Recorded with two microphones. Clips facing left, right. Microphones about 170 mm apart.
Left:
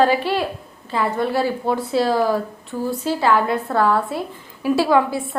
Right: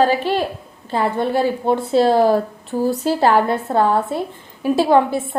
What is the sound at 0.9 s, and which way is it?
A woman's voice, 25° right (ahead or behind).